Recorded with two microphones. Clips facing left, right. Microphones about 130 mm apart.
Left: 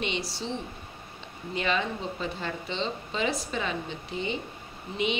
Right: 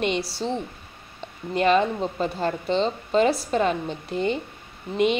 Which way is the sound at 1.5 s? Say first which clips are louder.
Right 9 dB; 45° right (ahead or behind).